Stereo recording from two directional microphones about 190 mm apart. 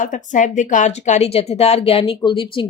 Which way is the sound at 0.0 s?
40° left (ahead or behind).